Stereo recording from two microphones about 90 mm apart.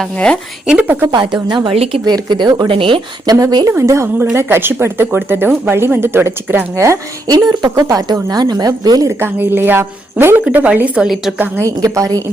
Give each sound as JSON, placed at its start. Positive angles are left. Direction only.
{"t": 1.0, "sound": "a woman's voice", "side_deg": -50}
{"t": 2.0, "sound": "a woman's voice", "side_deg": -55}
{"t": 2.6, "sound": "speech", "side_deg": -80}
{"t": 3.2, "sound": "a woman's voice", "side_deg": -45}
{"t": 3.7, "sound": "a woman's voice", "side_deg": -30}
{"t": 7.3, "sound": "a woman's voice", "side_deg": -50}
{"t": 9.0, "sound": "speech", "side_deg": -25}
{"t": 11.6, "sound": "a woman's voice", "side_deg": -40}